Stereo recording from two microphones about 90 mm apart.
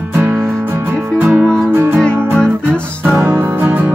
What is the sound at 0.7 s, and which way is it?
Music, 25° right (ahead or behind).